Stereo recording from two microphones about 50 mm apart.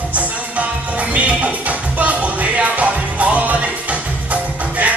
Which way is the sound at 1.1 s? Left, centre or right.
Right.